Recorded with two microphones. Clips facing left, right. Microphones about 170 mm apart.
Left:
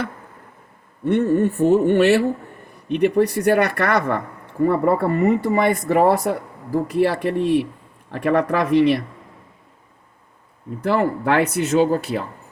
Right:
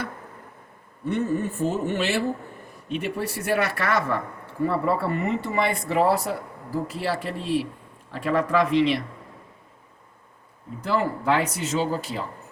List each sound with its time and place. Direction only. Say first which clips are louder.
1.0 s speech: left 8 dB; 65° left (ahead or behind)
10.8 s speech: left 5 dB; 60° left (ahead or behind)